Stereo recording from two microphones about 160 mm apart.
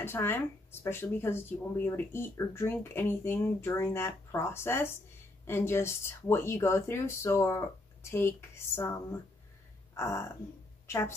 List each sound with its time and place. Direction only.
0.0 s speech: 15° left (ahead or behind)
9.9 s a woman's voice: 15° left (ahead or behind)